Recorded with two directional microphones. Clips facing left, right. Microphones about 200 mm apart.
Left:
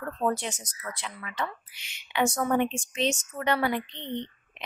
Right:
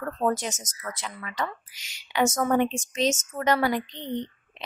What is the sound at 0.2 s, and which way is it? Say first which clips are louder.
Speech: right 2 dB; 40° right (ahead or behind).